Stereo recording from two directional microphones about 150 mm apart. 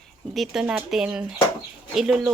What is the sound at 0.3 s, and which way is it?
Speech, 5° right (ahead or behind).